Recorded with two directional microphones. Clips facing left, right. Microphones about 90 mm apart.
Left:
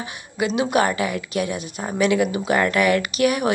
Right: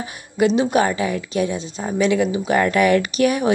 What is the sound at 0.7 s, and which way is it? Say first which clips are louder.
Speech: right 1 dB; 30° right (ahead or behind).